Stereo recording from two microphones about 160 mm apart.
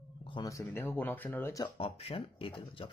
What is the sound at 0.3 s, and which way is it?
Speech, 20° left (ahead or behind).